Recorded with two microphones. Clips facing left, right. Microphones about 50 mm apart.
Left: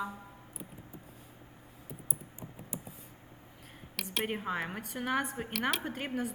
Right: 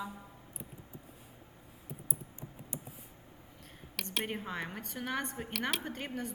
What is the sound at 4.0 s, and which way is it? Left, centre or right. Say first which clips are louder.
A woman's voice: left 2 dB; centre.